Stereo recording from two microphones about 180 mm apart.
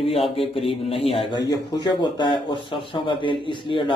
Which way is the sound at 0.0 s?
30° left (ahead or behind).